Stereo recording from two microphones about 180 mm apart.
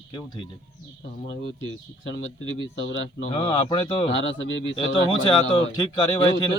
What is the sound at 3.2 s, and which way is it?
Speech, 35° left (ahead or behind).